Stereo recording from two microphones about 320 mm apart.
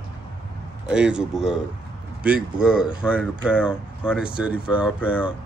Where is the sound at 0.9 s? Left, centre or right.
Centre.